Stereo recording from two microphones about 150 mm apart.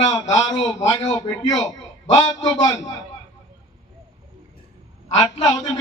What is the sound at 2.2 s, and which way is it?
Speech, 25° left (ahead or behind).